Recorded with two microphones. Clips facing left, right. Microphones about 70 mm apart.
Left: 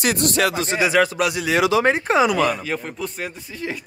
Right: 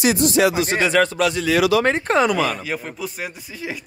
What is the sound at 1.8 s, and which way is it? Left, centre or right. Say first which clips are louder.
Speech: even; centre.